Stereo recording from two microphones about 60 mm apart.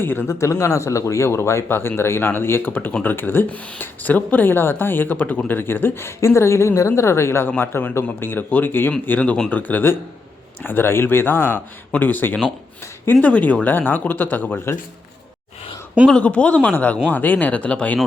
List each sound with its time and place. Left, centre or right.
0.0 s speech: left
0.3 s speech: left
1.6 s speech: left
7.6 s speech: left
9.0 s speech: left
16.0 s speech: centre